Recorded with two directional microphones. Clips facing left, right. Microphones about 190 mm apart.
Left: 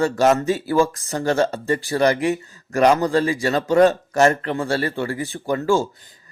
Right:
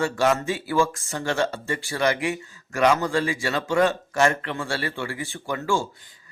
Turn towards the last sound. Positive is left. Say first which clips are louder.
# left 6 dB
turn(degrees=40)  # may be behind; listen again after turning